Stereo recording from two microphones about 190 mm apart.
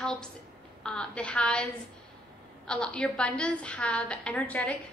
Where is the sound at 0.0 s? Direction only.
5° left (ahead or behind).